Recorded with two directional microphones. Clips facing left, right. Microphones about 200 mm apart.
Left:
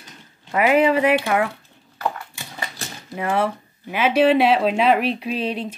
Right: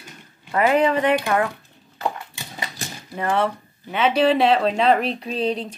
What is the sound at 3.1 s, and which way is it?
Speech, 10° left (ahead or behind).